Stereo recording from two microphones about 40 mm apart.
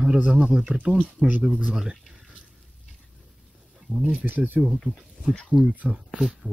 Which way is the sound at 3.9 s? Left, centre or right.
Left.